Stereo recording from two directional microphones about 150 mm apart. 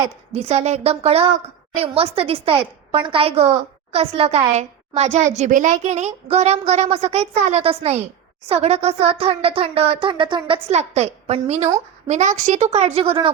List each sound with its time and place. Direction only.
0.3 s a woman's voice: 45° right (ahead or behind)